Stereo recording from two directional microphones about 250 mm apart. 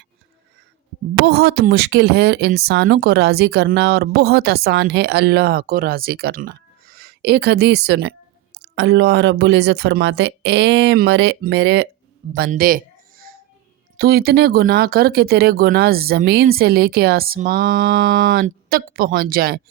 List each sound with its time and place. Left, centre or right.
1.2 s speech: right
12.5 s a sound: right
13.9 s speech: right